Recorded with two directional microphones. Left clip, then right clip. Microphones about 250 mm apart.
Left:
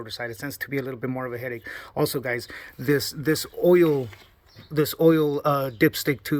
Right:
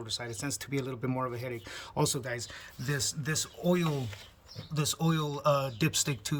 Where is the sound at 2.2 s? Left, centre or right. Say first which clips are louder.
Left 9 dB; centre.